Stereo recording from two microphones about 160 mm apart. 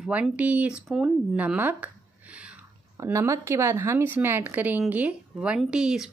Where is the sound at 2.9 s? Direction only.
20° right (ahead or behind).